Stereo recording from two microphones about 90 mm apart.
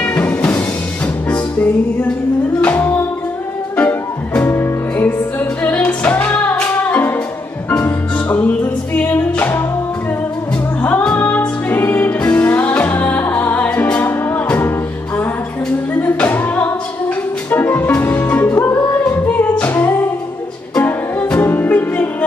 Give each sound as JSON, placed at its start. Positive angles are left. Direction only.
{"t": 0.0, "sound": "music", "side_deg": 20}
{"t": 10.8, "sound": "music", "side_deg": 15}
{"t": 15.9, "sound": "music", "side_deg": 20}
{"t": 19.0, "sound": "singing", "side_deg": 15}
{"t": 20.8, "sound": "music", "side_deg": 20}